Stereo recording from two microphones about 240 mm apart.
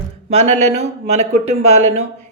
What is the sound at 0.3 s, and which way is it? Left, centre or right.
Speech, right.